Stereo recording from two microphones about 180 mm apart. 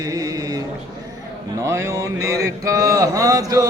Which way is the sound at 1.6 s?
15° right (ahead or behind).